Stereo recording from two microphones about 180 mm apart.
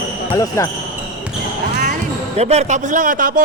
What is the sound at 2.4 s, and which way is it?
Speech, 35° right (ahead or behind).